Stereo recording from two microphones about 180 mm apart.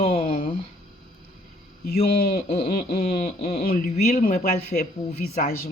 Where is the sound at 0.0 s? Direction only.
30° left (ahead or behind).